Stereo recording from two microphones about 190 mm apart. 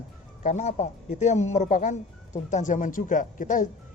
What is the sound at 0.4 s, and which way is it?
Speech, 40° left (ahead or behind).